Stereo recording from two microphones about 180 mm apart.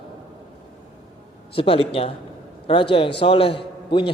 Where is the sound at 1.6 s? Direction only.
30° left (ahead or behind).